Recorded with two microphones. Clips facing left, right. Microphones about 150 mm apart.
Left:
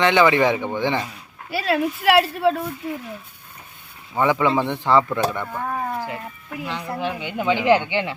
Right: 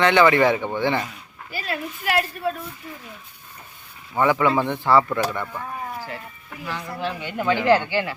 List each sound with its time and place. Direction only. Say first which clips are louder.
0.0 s speech: even; 15° left (ahead or behind)
1.5 s speech: left 8 dB; 85° left
4.2 s speech: even; 15° left (ahead or behind)
5.6 s livestock: left 6 dB; 60° left (ahead or behind)
6.7 s speech: left 2 dB; 25° left (ahead or behind)